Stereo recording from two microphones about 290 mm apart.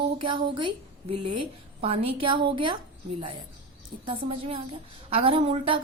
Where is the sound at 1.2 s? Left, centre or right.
Right.